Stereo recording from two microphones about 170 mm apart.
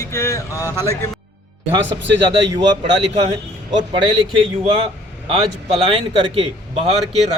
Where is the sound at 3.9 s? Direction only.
30° right (ahead or behind).